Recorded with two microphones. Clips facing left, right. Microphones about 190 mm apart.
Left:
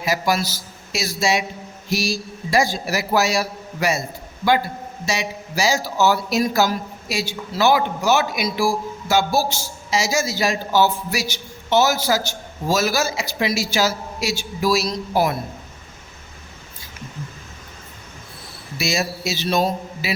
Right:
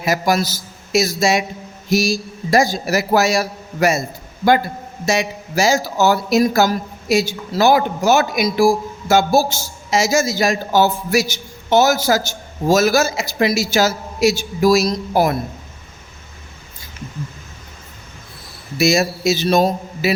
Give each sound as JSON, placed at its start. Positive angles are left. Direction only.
{"t": 0.0, "sound": "a man's voice", "side_deg": -50}
{"t": 5.0, "sound": "a man's voice", "side_deg": -50}
{"t": 18.8, "sound": "a man's voice", "side_deg": -45}